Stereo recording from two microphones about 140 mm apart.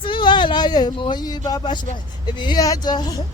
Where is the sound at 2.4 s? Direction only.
30° left (ahead or behind).